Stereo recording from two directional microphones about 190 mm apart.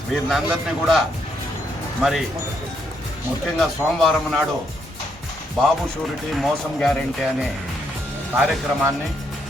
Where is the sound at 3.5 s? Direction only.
Centre (ahead or behind).